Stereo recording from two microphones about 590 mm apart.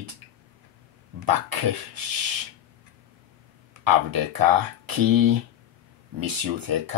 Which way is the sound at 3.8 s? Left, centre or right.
Right.